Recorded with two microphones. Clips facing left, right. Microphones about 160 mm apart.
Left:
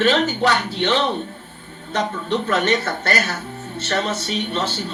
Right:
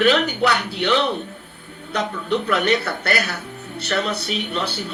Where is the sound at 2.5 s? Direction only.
40° left (ahead or behind).